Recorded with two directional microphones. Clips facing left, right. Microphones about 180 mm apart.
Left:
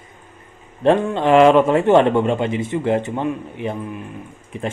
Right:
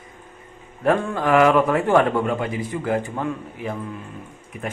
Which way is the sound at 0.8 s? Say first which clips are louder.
Left 4 dB; 25° left (ahead or behind).